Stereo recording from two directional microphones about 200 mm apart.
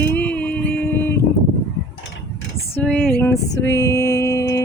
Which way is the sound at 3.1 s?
10° left (ahead or behind).